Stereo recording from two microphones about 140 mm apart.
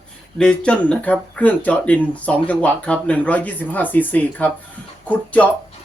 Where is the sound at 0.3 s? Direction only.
5° left (ahead or behind).